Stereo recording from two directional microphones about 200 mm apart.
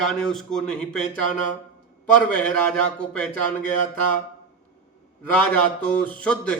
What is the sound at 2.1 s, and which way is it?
Speech, 5° left (ahead or behind).